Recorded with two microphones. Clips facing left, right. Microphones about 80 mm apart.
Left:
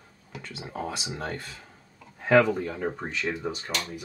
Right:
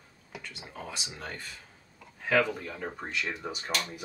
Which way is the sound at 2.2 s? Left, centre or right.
Left.